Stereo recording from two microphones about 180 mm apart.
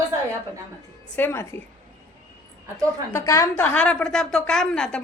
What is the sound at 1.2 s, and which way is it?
Speech, 15° left (ahead or behind).